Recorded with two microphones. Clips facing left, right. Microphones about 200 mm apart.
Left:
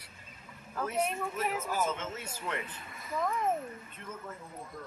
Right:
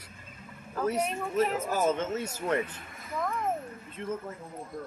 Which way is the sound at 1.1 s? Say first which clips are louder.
Right 6 dB; 40° right (ahead or behind).